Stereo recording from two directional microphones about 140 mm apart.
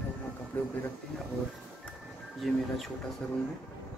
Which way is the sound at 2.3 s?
Centre (ahead or behind).